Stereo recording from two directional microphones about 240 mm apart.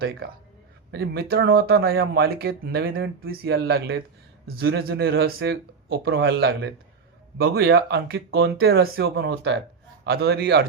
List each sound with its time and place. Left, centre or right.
0.0 s speech: right